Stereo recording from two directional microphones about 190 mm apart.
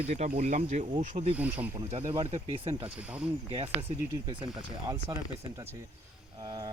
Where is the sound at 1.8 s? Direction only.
30° right (ahead or behind).